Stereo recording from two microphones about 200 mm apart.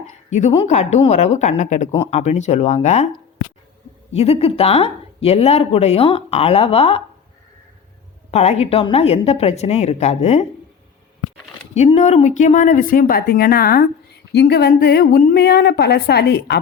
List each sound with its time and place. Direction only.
0.3 s a woman's voice: 35° left (ahead or behind)
4.1 s speech: 30° left (ahead or behind)
8.3 s a woman's voice: 30° left (ahead or behind)
11.7 s a woman's voice: 35° left (ahead or behind); by 16.6 s 55° left (ahead or behind)